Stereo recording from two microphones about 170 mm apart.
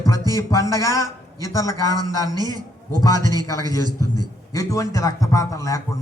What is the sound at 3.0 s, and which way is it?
Speech, 20° left (ahead or behind).